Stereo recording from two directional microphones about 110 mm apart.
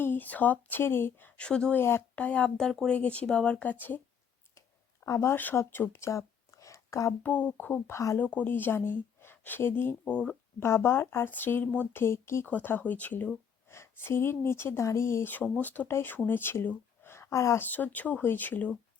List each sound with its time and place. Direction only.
0.0 s speech: 15° left (ahead or behind)
1.8 s speech: 20° left (ahead or behind)
5.0 s speech: 25° left (ahead or behind)
7.2 s speech: 15° left (ahead or behind)
8.2 s speech: 15° left (ahead or behind)
10.0 s speech: 10° left (ahead or behind)
10.6 s speech: 20° left (ahead or behind)
17.7 s speech: 15° left (ahead or behind)